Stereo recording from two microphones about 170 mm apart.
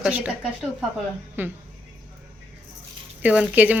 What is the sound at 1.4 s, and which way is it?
Speech, 10° right (ahead or behind).